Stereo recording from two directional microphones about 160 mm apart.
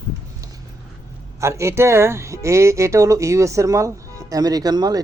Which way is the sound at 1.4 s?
15° right (ahead or behind).